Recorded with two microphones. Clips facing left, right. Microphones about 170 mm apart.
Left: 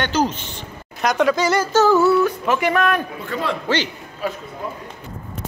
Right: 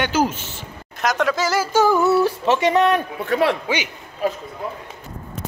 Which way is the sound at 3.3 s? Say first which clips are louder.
Right 6 dB; 70° right (ahead or behind).